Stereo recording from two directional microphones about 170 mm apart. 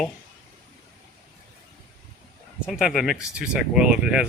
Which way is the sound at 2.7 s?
Centre (ahead or behind).